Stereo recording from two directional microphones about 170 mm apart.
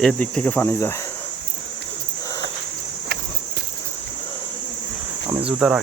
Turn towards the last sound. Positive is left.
turn(degrees=-5)  # may be behind; listen again after turning